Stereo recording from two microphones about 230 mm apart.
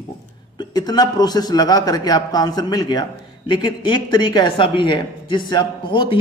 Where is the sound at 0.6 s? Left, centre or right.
Centre.